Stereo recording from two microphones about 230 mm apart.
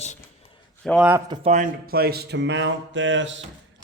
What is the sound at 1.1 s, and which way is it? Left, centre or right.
Speech, centre.